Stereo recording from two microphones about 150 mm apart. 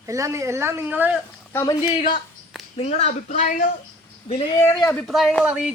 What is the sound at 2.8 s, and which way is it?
Speech, 45° left (ahead or behind).